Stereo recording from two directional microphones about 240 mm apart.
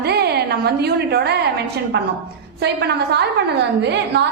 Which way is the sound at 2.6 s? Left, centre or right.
Right.